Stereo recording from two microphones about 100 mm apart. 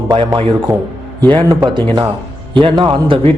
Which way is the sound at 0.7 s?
25° right (ahead or behind).